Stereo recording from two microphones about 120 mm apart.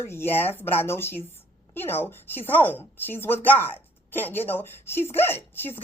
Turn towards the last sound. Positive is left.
turn(degrees=20)  # may be behind; listen again after turning